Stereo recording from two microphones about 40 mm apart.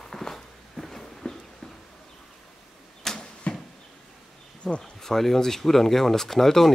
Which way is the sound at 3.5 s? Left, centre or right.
Left.